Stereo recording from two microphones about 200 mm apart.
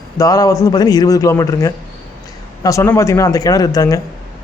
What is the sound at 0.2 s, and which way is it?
Speech, 15° left (ahead or behind).